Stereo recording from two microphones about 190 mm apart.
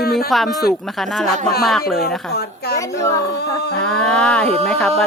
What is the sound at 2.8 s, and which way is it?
Speech, 15° left (ahead or behind).